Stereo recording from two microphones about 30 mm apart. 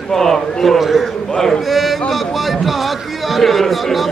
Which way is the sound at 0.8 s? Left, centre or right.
Centre.